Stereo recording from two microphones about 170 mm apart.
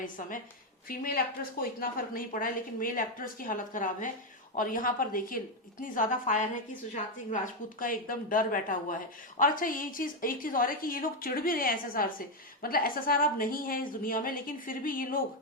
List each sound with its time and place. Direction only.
0.0 s a woman's voice: 50° left (ahead or behind)